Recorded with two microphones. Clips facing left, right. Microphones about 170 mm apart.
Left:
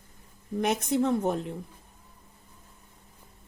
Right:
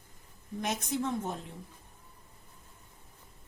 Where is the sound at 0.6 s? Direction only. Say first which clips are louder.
Left 7 dB; 65° left (ahead or behind).